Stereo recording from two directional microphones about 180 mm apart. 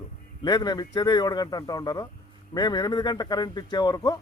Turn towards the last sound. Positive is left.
turn(degrees=25)  # may be behind; listen again after turning